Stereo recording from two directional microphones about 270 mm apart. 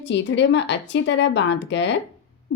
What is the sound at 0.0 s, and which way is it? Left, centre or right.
A woman's voice, left.